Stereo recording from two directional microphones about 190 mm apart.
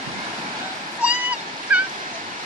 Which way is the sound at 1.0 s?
5° right (ahead or behind).